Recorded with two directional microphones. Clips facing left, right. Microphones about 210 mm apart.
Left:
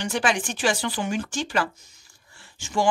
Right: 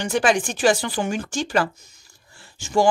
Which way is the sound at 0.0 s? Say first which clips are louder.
Right 5 dB; 45° right (ahead or behind).